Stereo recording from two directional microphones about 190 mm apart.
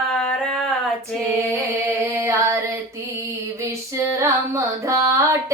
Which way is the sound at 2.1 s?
15° right (ahead or behind).